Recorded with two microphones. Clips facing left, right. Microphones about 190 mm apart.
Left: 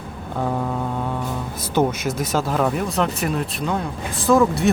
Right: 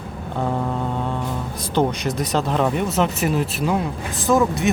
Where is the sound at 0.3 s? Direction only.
Centre (ahead or behind).